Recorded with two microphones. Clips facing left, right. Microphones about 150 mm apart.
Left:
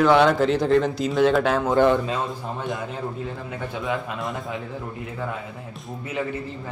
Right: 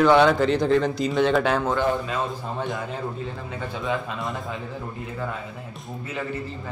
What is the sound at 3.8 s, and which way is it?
Speech, centre (ahead or behind).